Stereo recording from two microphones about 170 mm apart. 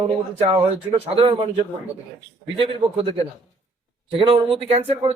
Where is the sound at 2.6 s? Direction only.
30° right (ahead or behind).